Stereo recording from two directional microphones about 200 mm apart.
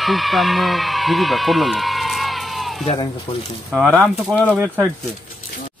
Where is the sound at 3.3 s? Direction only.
20° left (ahead or behind).